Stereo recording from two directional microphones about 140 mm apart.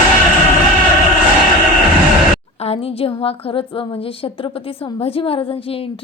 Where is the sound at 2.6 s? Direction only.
45° left (ahead or behind).